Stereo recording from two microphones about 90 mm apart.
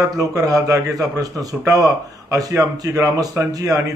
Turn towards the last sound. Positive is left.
turn(degrees=-40)  # may be behind; listen again after turning